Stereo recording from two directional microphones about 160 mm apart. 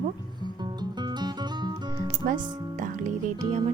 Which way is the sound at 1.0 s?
25° right (ahead or behind).